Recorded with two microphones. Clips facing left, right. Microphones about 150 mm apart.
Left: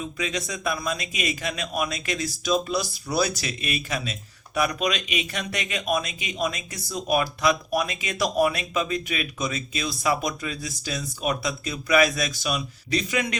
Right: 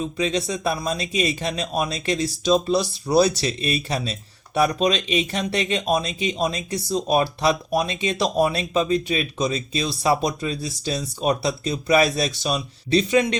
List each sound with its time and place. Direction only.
0.0 s a man's voice: 30° right (ahead or behind)